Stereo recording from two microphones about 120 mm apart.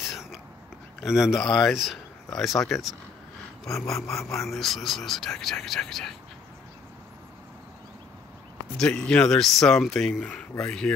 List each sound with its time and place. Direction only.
0.0 s whispering: centre (ahead or behind)
1.0 s speech: 5° right (ahead or behind)
3.9 s a sound: 25° left (ahead or behind)
4.3 s speech: centre (ahead or behind)
8.7 s speech: 5° left (ahead or behind)